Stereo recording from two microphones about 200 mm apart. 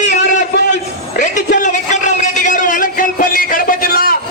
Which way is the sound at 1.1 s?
40° left (ahead or behind).